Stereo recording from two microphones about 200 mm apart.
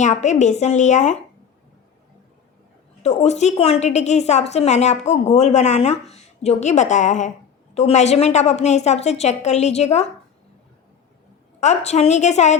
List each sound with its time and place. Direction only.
0.0 s a woman's voice: 35° left (ahead or behind)
3.0 s a woman's voice: 35° left (ahead or behind)
11.6 s a woman's voice: 35° left (ahead or behind)